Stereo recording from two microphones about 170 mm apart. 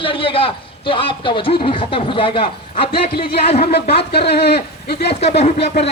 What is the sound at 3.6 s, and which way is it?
Speech, 70° left (ahead or behind).